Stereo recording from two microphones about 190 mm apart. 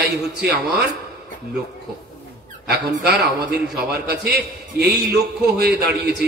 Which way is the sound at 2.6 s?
60° right (ahead or behind).